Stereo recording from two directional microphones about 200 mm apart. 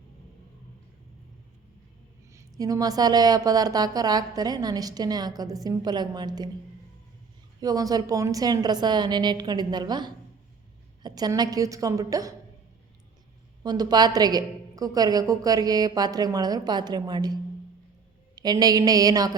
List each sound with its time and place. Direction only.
2.3 s a woman's voice: 15° right (ahead or behind)
7.6 s a woman's voice: 20° right (ahead or behind)
13.6 s a woman's voice: 20° right (ahead or behind)
18.3 s a woman's voice: 20° right (ahead or behind)